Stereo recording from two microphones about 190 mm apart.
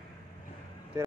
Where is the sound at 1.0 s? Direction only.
15° right (ahead or behind).